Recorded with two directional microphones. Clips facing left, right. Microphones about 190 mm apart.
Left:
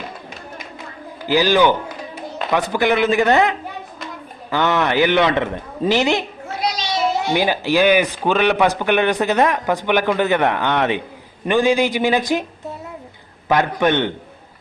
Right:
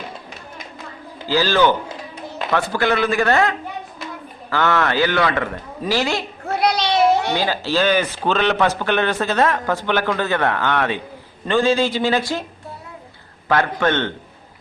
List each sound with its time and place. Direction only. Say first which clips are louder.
1.3 s a man's voice: left 2 dB; 15° left (ahead or behind)
6.5 s children playing: right 5 dB; 65° right (ahead or behind)
7.3 s a man's voice: left 3 dB; 15° left (ahead or behind)
13.5 s a man's voice: left 2 dB; 15° left (ahead or behind)